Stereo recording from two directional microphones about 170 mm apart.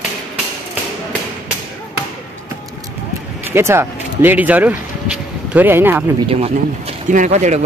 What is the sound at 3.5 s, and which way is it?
Speech, 15° right (ahead or behind).